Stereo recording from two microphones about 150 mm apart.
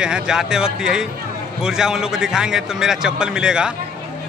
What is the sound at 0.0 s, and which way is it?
A man's voice, 5° right (ahead or behind).